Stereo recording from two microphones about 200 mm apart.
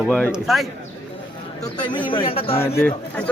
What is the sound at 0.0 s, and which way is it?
Speech, centre (ahead or behind).